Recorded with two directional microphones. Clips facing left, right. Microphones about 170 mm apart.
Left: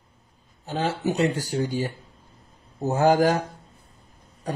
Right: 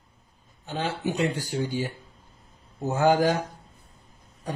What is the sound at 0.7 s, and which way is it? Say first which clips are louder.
A man's voice: left 3 dB; 40° left (ahead or behind).